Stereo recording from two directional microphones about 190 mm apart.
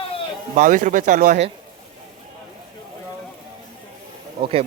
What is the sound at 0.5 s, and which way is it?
Speech, 45° right (ahead or behind).